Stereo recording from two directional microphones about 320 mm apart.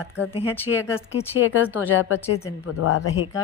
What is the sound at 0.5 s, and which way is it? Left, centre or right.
Speech, centre.